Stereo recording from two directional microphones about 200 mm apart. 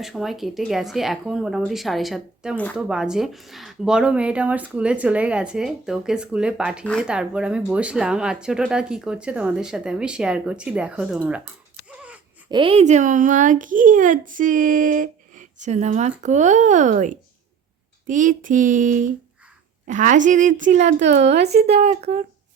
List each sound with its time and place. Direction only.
0.0 s speech: centre (ahead or behind)
11.9 s a sound: 5° right (ahead or behind)
12.5 s a child's voice: 25° right (ahead or behind)